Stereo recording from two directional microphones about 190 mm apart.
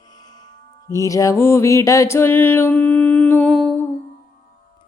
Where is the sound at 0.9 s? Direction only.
15° left (ahead or behind).